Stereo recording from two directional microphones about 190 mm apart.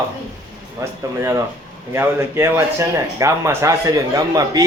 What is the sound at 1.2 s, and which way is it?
Speech, 15° right (ahead or behind).